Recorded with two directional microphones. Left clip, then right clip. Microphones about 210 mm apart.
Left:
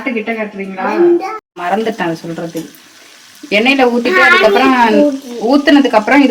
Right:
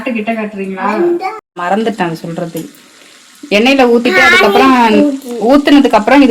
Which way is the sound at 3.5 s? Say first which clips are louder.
Right 2 dB; 35° right (ahead or behind).